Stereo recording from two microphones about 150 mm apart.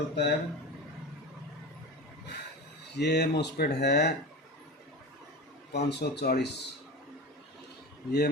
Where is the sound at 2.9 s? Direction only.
90° left.